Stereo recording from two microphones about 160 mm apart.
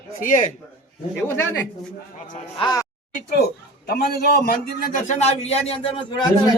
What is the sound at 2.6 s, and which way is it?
Speech, 25° left (ahead or behind).